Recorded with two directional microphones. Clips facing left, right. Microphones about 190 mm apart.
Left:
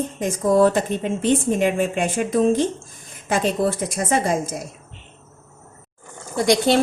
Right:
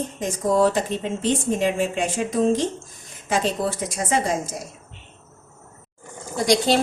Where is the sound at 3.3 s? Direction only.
55° left (ahead or behind).